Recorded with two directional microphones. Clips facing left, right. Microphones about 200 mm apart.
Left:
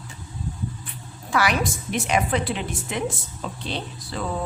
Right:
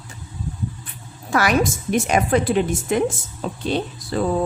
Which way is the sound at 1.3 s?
45° right (ahead or behind).